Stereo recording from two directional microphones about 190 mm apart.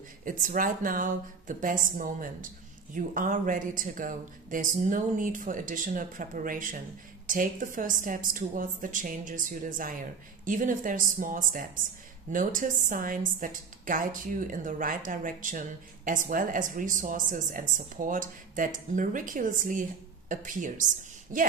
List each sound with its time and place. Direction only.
0.2 s a woman's voice: 45° right (ahead or behind)